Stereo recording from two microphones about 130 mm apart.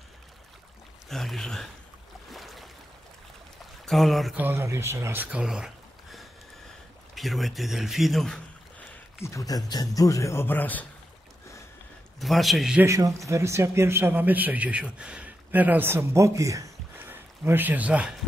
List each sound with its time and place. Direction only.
1.0 s speech: centre (ahead or behind)
2.3 s boat: centre (ahead or behind)
3.8 s speech: centre (ahead or behind)
4.4 s speech: 15° right (ahead or behind)
7.2 s speech: centre (ahead or behind)
9.2 s a man's voice: 25° left (ahead or behind)
12.2 s speech: centre (ahead or behind)
12.8 s speech: 25° right (ahead or behind)